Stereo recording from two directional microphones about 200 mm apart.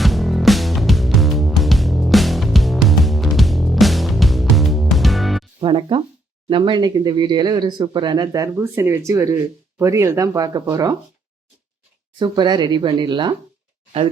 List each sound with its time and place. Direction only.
0.0 s music: centre (ahead or behind)
5.5 s music: 25° right (ahead or behind)
6.5 s speech: 25° right (ahead or behind)
12.2 s speech: 20° right (ahead or behind)